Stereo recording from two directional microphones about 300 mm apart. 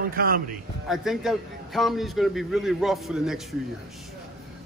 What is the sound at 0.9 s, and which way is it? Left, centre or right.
A man's voice, centre.